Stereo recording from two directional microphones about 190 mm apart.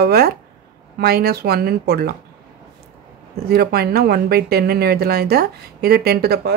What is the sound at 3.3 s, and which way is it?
Speech, 55° right (ahead or behind).